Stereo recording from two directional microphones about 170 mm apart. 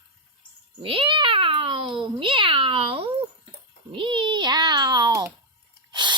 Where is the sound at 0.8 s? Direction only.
30° right (ahead or behind).